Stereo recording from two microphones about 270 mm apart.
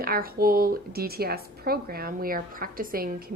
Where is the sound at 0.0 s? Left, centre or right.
Right.